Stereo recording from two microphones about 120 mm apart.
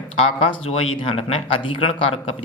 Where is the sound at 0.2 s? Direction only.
55° left (ahead or behind).